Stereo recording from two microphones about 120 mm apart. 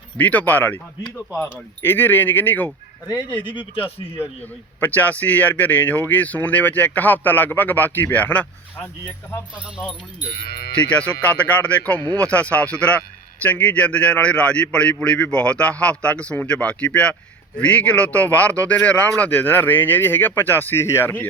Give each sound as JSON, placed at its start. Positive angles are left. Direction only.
{"t": 0.2, "sound": "a man's voice", "side_deg": 10}
{"t": 3.2, "sound": "speech", "side_deg": 40}
{"t": 4.8, "sound": "a man's voice", "side_deg": 15}
{"t": 10.8, "sound": "a man's voice", "side_deg": 10}